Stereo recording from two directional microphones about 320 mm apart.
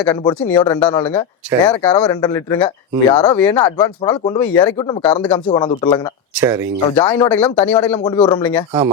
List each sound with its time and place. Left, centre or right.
0.0 s speech: centre
6.3 s speech: centre
6.9 s speech: centre